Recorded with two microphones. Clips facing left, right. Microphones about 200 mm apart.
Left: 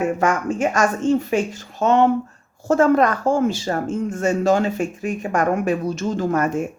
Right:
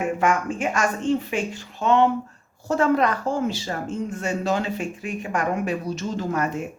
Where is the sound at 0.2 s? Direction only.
40° left (ahead or behind).